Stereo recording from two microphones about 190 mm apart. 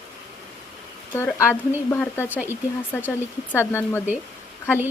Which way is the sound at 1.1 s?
15° left (ahead or behind).